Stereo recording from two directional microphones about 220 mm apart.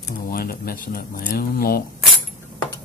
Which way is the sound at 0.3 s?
45° left (ahead or behind).